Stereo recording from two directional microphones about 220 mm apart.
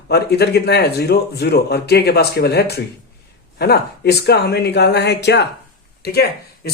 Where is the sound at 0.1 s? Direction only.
45° left (ahead or behind).